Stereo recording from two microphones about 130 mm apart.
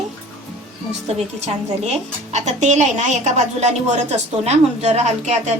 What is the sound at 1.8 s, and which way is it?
Speech, 60° right (ahead or behind).